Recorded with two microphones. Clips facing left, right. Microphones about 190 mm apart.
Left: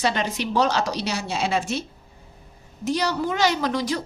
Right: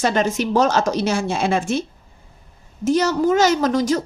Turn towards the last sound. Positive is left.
turn(degrees=-45)  # may be behind; listen again after turning